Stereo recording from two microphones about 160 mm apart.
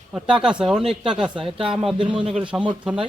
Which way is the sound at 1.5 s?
35° right (ahead or behind).